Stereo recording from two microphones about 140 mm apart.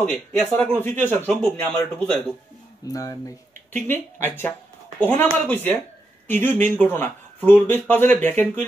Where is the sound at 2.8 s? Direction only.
25° left (ahead or behind).